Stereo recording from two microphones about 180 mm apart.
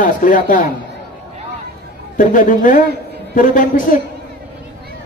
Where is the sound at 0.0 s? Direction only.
45° left (ahead or behind).